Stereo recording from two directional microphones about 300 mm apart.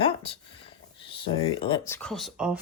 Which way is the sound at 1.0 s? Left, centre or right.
Centre.